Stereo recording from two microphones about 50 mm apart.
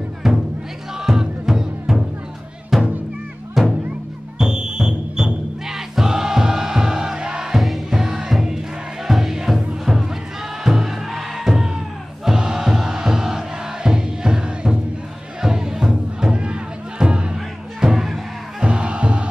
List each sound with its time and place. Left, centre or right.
0.2 s music: centre
7.5 s music: centre
7.9 s music: centre
18.6 s music: right